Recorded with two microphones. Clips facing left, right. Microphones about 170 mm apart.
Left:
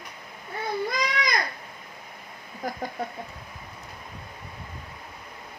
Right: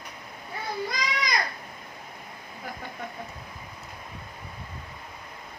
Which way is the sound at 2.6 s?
40° left (ahead or behind).